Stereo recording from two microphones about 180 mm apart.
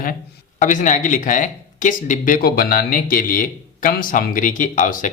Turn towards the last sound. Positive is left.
turn(degrees=45)  # may be behind; listen again after turning